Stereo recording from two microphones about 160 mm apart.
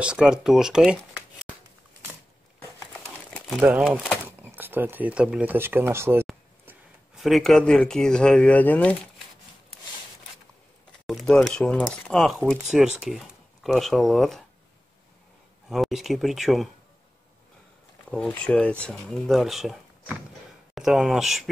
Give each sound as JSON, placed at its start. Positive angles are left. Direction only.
{"t": 0.0, "sound": "speech", "side_deg": -5}
{"t": 2.9, "sound": "crumpling", "side_deg": 10}
{"t": 3.5, "sound": "speech", "side_deg": -5}
{"t": 4.4, "sound": "speech", "side_deg": -10}
{"t": 7.2, "sound": "speech", "side_deg": 0}
{"t": 11.1, "sound": "speech", "side_deg": 5}
{"t": 15.7, "sound": "speech", "side_deg": 0}
{"t": 18.1, "sound": "speech", "side_deg": 5}